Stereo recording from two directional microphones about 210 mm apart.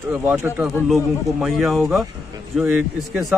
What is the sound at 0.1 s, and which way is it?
A man's voice, 10° right (ahead or behind).